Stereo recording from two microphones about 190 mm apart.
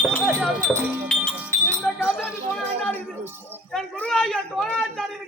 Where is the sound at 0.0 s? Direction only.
5° left (ahead or behind).